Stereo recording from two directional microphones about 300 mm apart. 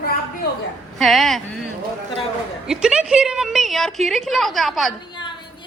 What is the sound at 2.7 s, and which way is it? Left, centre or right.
A woman's voice, centre.